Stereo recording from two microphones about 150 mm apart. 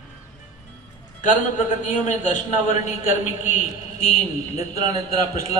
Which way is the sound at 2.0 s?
60° left (ahead or behind).